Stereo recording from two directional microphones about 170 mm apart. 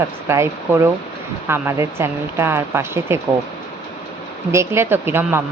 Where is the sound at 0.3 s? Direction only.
15° right (ahead or behind).